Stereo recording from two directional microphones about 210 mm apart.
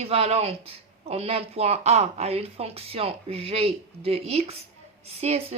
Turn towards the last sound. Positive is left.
turn(degrees=-30)  # may be behind; listen again after turning